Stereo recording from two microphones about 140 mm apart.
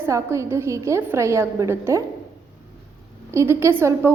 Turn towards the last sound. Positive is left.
turn(degrees=-15)  # may be behind; listen again after turning